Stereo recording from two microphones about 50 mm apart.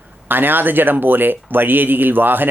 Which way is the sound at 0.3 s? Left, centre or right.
Right.